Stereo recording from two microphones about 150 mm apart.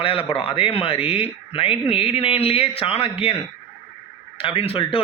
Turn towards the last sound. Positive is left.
turn(degrees=40)  # may be behind; listen again after turning